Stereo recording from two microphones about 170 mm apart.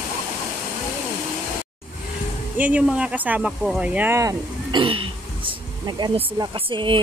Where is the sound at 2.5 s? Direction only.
10° right (ahead or behind).